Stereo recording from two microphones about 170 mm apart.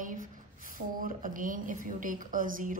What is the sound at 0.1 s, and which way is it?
A woman's voice, 55° right (ahead or behind).